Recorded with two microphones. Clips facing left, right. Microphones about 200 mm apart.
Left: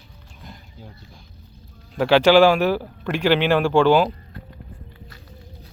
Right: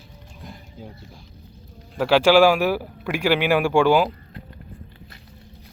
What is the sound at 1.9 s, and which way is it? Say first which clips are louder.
A man's voice: left 1 dB; 5° right (ahead or behind).